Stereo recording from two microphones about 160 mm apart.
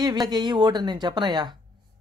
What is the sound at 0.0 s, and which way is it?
Speech, 25° right (ahead or behind).